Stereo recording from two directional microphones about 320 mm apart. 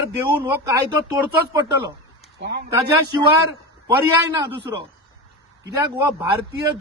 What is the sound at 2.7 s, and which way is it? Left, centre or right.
Speech, centre.